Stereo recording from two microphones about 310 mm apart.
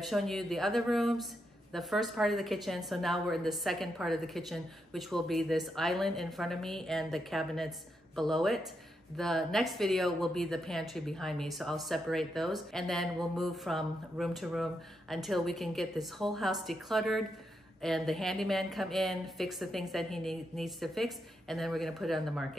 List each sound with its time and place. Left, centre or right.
0.1 s a woman's voice: centre